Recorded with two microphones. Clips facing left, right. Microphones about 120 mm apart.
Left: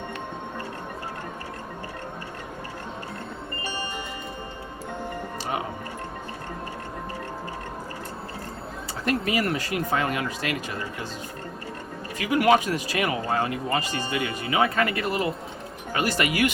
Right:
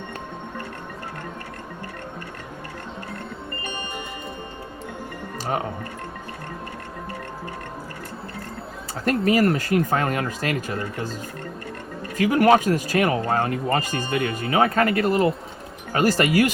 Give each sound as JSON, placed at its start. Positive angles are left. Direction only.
{"t": 9.0, "sound": "speech", "side_deg": -40}
{"t": 12.1, "sound": "speech", "side_deg": -45}